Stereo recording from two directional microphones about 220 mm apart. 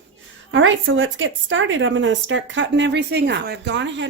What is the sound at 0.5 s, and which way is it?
A woman's voice, 60° right (ahead or behind).